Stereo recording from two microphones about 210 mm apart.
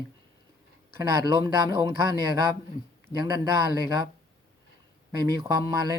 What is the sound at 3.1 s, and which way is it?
Speech, 20° right (ahead or behind).